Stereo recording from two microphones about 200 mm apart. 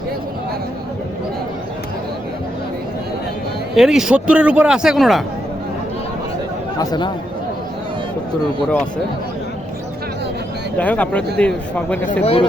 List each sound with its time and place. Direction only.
3.8 s a man's voice: centre (ahead or behind)
6.7 s speech: 20° left (ahead or behind)
10.8 s a man's voice: 5° left (ahead or behind)
12.2 s speech: 30° left (ahead or behind)